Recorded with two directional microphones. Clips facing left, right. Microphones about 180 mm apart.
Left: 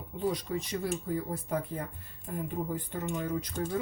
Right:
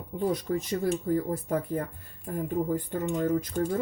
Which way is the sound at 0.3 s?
50° right (ahead or behind).